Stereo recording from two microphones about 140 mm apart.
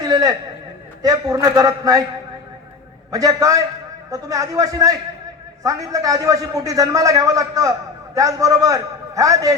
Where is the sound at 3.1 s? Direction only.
25° right (ahead or behind).